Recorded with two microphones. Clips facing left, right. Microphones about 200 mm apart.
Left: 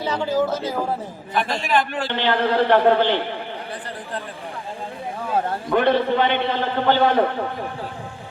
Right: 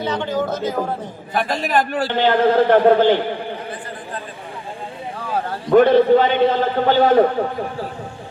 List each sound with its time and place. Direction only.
0.0 s speech: 10° left (ahead or behind)
1.3 s a man's voice: 45° right (ahead or behind)
5.7 s a man's voice: 45° right (ahead or behind)